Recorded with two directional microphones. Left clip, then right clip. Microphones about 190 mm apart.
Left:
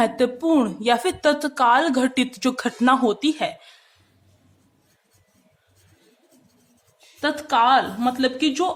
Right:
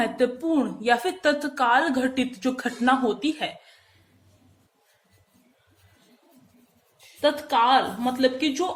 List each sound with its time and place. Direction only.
0.0 s a woman's voice: 35° left (ahead or behind)
7.2 s a woman's voice: 35° left (ahead or behind)